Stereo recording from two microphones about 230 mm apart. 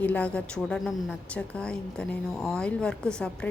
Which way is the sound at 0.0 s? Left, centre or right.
Centre.